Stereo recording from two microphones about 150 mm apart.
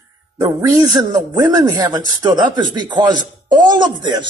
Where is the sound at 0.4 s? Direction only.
20° right (ahead or behind).